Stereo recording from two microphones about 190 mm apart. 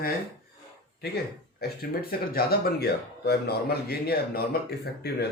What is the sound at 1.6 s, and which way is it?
A man's voice, 55° left (ahead or behind).